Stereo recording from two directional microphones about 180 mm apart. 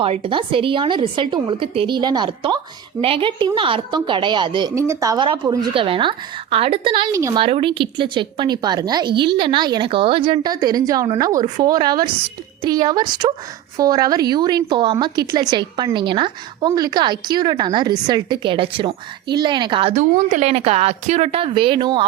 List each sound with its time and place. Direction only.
0.0 s a woman's voice: 30° right (ahead or behind)
7.1 s speech: 15° right (ahead or behind)
7.3 s a woman's voice: 30° right (ahead or behind)